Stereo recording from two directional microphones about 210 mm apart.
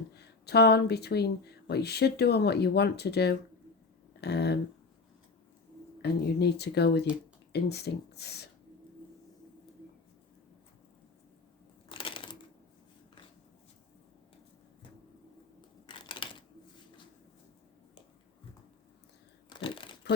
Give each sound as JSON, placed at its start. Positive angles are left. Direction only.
{"t": 0.1, "sound": "speech", "side_deg": 50}
{"t": 6.0, "sound": "speech", "side_deg": 50}
{"t": 11.9, "sound": "crushing", "side_deg": 25}
{"t": 15.9, "sound": "a sound", "side_deg": 25}
{"t": 19.5, "sound": "crumpling", "side_deg": 25}